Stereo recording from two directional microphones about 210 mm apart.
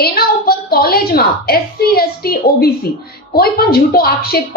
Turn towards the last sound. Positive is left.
turn(degrees=45)  # may be behind; listen again after turning